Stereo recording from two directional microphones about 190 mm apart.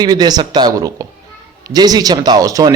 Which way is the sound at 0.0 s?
20° right (ahead or behind).